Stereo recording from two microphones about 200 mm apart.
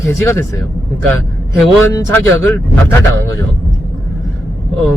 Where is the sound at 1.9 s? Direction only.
10° left (ahead or behind).